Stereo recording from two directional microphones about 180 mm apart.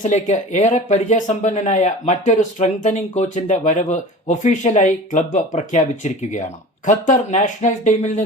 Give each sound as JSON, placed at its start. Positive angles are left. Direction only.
{"t": 0.0, "sound": "speech", "side_deg": 40}